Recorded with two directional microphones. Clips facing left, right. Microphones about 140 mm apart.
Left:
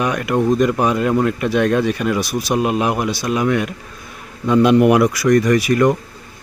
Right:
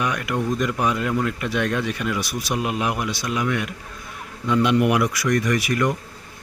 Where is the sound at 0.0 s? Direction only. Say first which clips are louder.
Left 7 dB; 30° left (ahead or behind).